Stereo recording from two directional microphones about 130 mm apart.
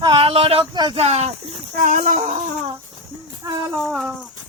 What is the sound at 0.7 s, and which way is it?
Speech, 35° right (ahead or behind).